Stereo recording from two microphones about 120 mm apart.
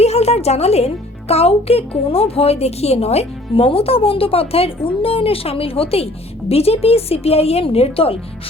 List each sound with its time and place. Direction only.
0.0 s a woman's voice: 60° left (ahead or behind)